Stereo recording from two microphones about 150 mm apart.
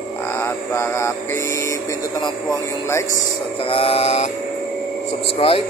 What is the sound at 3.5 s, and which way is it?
Speech, 40° left (ahead or behind).